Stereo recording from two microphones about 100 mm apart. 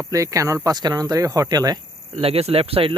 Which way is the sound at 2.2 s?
80° right.